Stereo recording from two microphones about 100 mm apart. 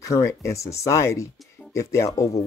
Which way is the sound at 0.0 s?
30° left (ahead or behind).